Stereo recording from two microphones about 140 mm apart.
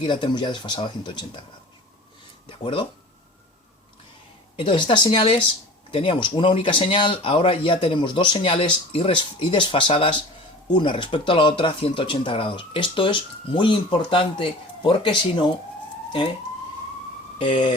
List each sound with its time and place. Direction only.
0.0 s speech: 35° left (ahead or behind)
2.5 s speech: 35° left (ahead or behind)
4.5 s speech: 35° left (ahead or behind)
17.3 s speech: 40° left (ahead or behind)